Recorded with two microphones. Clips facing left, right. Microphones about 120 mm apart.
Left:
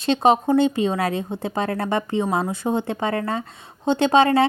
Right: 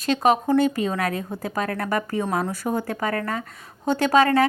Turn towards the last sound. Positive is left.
turn(degrees=25)  # may be behind; listen again after turning